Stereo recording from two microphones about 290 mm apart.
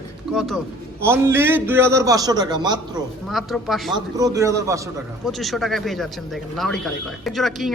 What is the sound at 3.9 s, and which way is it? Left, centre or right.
Speech, centre.